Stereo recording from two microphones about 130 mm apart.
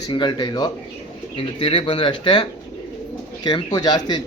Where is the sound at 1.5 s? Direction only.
45° left (ahead or behind); by 4.2 s 30° left (ahead or behind).